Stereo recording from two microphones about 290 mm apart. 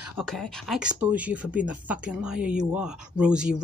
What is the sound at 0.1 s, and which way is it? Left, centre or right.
Speech, centre.